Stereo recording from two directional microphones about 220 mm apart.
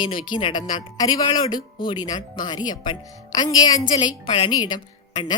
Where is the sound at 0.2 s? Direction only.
20° left (ahead or behind).